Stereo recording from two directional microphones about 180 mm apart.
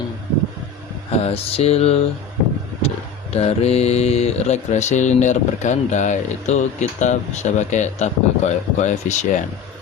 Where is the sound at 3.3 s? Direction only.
35° left (ahead or behind).